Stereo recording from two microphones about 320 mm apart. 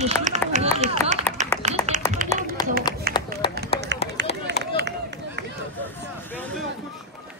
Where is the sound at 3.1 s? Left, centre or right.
Right.